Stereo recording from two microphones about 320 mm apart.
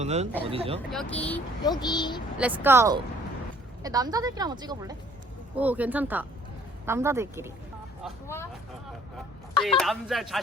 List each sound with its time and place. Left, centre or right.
0.0 s speech: right
0.9 s speech: centre
2.4 s speech: centre
8.0 s speech: centre
9.6 s speech: centre